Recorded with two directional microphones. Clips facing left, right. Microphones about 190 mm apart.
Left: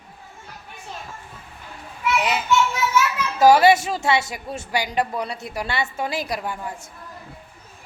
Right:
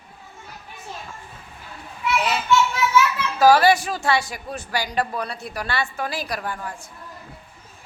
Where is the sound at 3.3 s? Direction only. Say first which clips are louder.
Left 1 dB; 20° left (ahead or behind).